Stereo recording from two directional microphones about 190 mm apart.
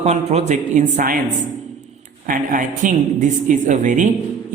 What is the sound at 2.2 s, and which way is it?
A woman's voice, 45° right (ahead or behind).